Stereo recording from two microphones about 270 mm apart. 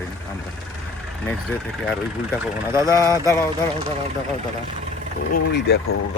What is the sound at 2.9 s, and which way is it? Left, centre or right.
Speech, centre.